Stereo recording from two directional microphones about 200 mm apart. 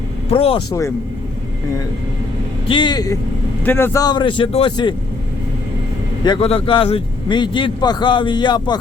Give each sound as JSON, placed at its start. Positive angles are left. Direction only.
{"t": 0.3, "sound": "a man's voice", "side_deg": 30}
{"t": 2.6, "sound": "a man's voice", "side_deg": 25}
{"t": 6.2, "sound": "a man's voice", "side_deg": 25}